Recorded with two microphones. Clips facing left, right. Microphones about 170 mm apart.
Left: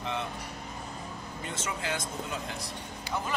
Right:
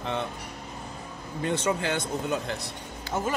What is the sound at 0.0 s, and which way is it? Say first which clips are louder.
Vehicle: right 4 dB; 60° right (ahead or behind).